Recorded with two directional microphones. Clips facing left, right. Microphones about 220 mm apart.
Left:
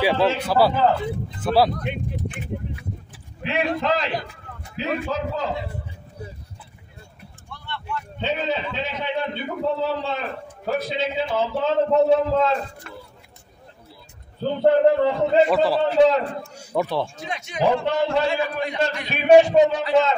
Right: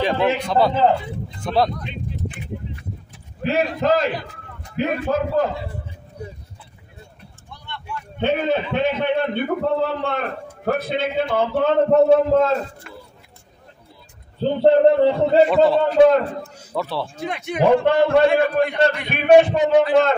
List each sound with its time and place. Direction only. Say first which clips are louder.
0.4 s a man's voice: right 1 dB; 5° left (ahead or behind)
3.4 s a man's voice: right 4 dB; 40° right (ahead or behind)
7.4 s vehicle: left 2 dB; 15° right (ahead or behind)
8.2 s a man's voice: right 6 dB; 55° right (ahead or behind)
14.4 s a man's voice: right 3 dB; 30° right (ahead or behind)
15.5 s a man's voice: right 4 dB; centre (ahead or behind)
16.0 s a man's voice: right 4 dB; 55° right (ahead or behind)
16.5 s speech: left 4 dB; 15° left (ahead or behind)
17.2 s a man's voice: right 4 dB; 55° right (ahead or behind)